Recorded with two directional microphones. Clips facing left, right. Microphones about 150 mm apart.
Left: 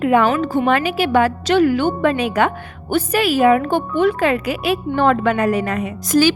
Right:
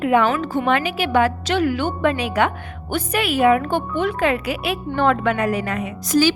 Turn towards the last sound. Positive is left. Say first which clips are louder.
# left 2 dB
turn(degrees=45)  # may be behind; listen again after turning